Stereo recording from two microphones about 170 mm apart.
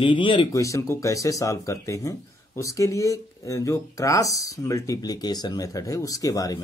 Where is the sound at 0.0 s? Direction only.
30° left (ahead or behind).